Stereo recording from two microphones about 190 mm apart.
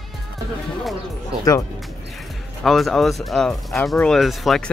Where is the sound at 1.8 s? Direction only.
Centre (ahead or behind).